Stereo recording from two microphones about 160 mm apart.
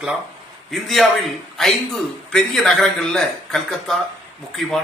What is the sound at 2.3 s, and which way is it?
A man's voice, 5° left (ahead or behind).